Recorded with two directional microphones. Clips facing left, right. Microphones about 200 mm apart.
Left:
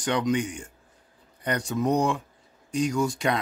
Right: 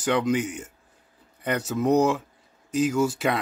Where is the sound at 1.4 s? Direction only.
5° right (ahead or behind).